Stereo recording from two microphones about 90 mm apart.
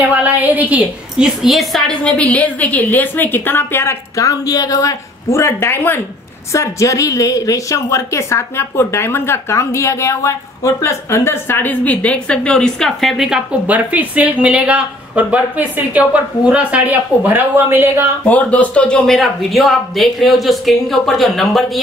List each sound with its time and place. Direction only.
0.1 s speech: 15° right (ahead or behind)
1.4 s speech: centre (ahead or behind)
2.0 s a woman's voice: 15° left (ahead or behind)
4.2 s a woman's voice: 40° left (ahead or behind); by 13.4 s centre (ahead or behind)
13.7 s speech: 15° right (ahead or behind)
18.2 s speech: 15° left (ahead or behind); by 21.8 s centre (ahead or behind)